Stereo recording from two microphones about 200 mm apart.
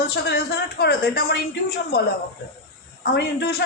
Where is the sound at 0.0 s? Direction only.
55° left (ahead or behind).